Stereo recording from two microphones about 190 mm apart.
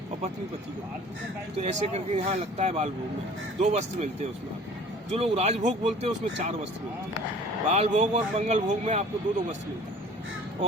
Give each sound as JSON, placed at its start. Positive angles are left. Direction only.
{"t": 1.5, "sound": "speech", "side_deg": -35}
{"t": 7.7, "sound": "speech", "side_deg": -40}